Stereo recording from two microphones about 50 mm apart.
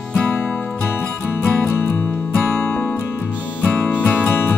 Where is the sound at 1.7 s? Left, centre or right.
Left.